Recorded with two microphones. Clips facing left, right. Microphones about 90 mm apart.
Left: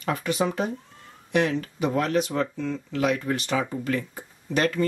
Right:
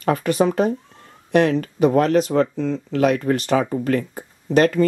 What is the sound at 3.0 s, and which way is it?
Speech, 50° right (ahead or behind).